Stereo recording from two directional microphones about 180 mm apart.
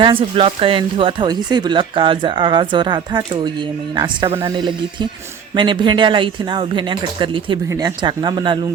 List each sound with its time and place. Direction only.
0.0 s speech: 30° right (ahead or behind)